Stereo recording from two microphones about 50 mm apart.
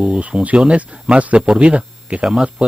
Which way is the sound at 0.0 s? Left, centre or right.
Right.